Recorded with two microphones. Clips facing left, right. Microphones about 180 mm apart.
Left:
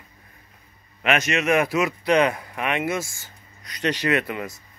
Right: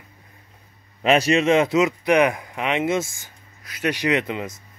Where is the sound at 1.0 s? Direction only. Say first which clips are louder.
Right 5 dB; 30° right (ahead or behind).